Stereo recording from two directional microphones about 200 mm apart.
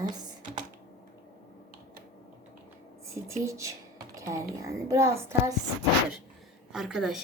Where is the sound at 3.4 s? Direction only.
15° right (ahead or behind).